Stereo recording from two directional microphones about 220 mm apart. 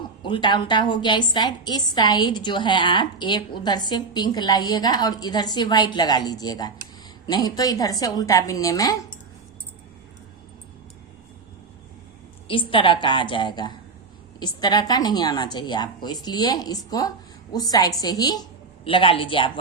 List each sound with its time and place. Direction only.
0.2 s a woman's voice: 20° left (ahead or behind)
12.5 s a woman's voice: 25° left (ahead or behind)